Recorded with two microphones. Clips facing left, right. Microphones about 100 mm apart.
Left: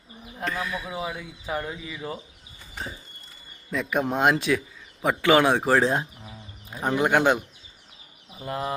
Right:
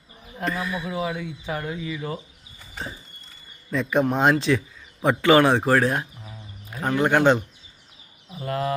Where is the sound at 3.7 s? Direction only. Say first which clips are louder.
Right 4 dB; 5° left (ahead or behind).